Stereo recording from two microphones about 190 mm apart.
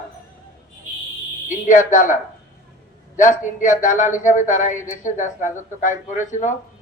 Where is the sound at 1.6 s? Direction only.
40° left (ahead or behind).